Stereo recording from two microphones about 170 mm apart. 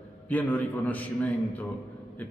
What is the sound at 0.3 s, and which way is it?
A man's voice, 10° left (ahead or behind).